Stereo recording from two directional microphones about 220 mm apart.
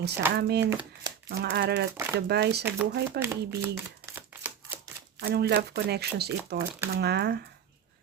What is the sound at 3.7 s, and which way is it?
Shuffling cards, 10° right (ahead or behind).